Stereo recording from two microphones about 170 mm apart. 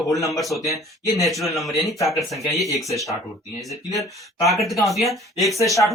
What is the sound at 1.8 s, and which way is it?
Speech, 20° left (ahead or behind).